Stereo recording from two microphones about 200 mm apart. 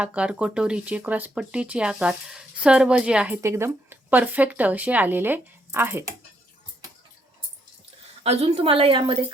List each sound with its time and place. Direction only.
0.0 s speech: 5° right (ahead or behind)
8.2 s a woman's voice: 30° right (ahead or behind)